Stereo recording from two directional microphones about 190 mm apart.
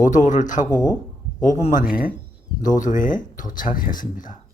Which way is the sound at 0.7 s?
20° left (ahead or behind).